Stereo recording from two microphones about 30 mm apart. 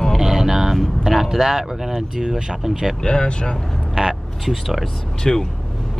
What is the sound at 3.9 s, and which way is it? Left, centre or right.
Speech, centre.